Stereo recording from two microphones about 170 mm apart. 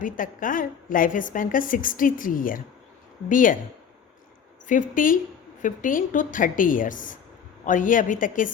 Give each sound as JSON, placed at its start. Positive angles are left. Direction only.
{"t": 0.0, "sound": "a woman's voice", "side_deg": 55}
{"t": 4.6, "sound": "a woman's voice", "side_deg": 50}